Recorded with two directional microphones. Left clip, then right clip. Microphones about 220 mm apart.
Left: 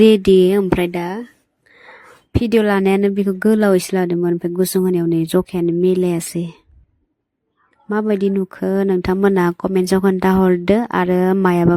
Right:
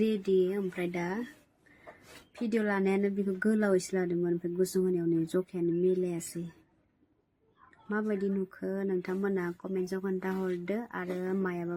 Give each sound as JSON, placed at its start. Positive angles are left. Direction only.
{"t": 0.0, "sound": "speech", "side_deg": 50}
{"t": 2.4, "sound": "speech", "side_deg": 40}
{"t": 7.9, "sound": "speech", "side_deg": 40}